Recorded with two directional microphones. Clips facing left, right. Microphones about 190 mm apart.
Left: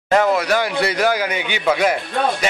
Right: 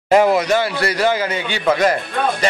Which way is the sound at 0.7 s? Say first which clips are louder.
Even; 15° left (ahead or behind).